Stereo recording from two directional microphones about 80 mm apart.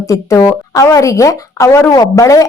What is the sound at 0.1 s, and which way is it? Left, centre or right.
Speech, left.